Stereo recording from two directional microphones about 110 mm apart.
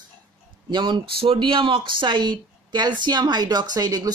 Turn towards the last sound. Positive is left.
turn(degrees=-35)  # may be behind; listen again after turning